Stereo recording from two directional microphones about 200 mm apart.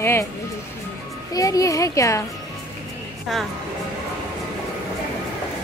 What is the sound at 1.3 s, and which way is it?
Speech, 15° left (ahead or behind).